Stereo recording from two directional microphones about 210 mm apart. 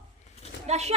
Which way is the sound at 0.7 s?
30° right (ahead or behind).